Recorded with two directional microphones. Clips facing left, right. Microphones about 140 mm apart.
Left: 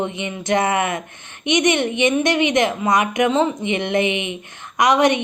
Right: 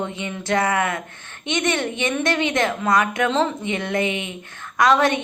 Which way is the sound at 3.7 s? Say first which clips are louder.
Left 3 dB; 20° left (ahead or behind).